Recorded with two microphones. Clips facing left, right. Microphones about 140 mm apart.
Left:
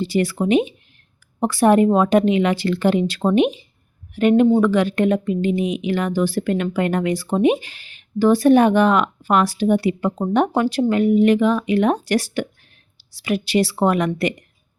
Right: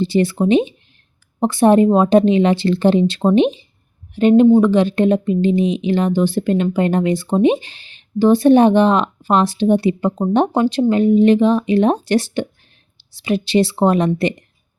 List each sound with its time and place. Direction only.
0.0 s speech: 25° right (ahead or behind)